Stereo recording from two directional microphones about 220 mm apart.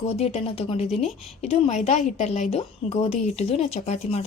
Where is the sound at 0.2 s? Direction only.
30° left (ahead or behind).